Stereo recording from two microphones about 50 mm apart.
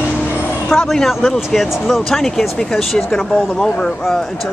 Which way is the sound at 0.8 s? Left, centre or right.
Centre.